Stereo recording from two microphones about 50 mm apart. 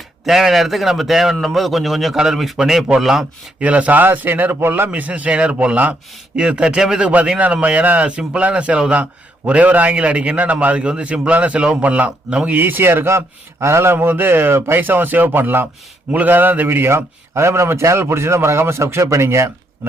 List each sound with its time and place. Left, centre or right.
0.3 s a man's voice: centre
2.1 s a man's voice: centre
3.6 s a man's voice: right
4.9 s a man's voice: right
7.3 s a man's voice: right
12.5 s a man's voice: right